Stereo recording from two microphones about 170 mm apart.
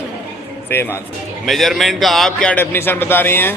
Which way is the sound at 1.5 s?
Centre (ahead or behind).